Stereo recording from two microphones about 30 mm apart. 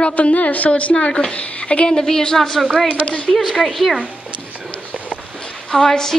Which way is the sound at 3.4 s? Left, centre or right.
Centre.